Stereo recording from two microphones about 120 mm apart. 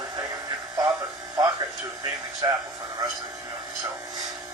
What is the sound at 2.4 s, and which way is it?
Speech, 35° right (ahead or behind).